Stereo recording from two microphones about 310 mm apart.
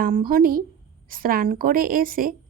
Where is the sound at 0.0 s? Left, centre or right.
Right.